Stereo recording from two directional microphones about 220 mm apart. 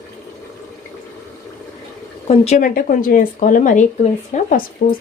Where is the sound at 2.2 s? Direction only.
30° left (ahead or behind).